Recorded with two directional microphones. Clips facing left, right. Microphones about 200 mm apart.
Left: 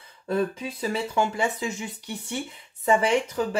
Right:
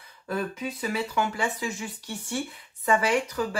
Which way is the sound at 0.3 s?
30° left (ahead or behind).